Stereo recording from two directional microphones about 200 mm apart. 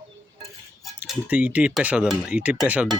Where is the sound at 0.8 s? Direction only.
5° right (ahead or behind).